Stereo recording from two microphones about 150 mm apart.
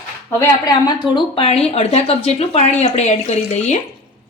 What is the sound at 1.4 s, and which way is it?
A woman's voice, 45° left (ahead or behind).